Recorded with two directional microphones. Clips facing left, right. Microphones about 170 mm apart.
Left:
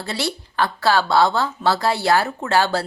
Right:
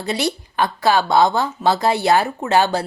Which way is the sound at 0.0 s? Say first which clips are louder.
Right 4 dB; 15° right (ahead or behind).